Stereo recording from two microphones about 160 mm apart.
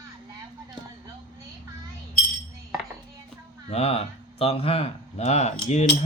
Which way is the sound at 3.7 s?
40° left (ahead or behind).